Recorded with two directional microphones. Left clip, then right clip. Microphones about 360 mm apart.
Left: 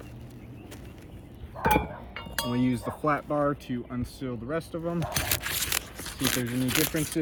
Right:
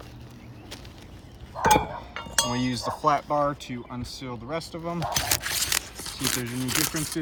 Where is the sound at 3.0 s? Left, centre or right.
Right.